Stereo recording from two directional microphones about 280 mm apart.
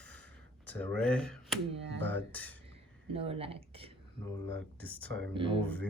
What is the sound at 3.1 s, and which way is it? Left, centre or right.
Speech, centre.